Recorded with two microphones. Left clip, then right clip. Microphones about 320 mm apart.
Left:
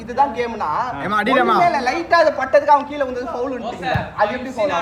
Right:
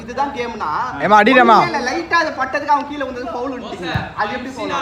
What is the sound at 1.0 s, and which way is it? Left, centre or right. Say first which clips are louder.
Speech: right 8 dB; centre.